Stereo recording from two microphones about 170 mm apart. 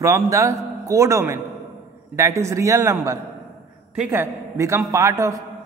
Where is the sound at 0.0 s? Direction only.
20° right (ahead or behind).